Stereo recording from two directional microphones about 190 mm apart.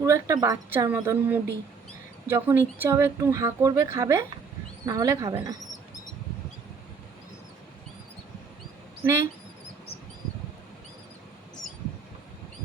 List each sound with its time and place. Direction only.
0.0 s speech: 15° right (ahead or behind)
9.0 s speech: 15° right (ahead or behind)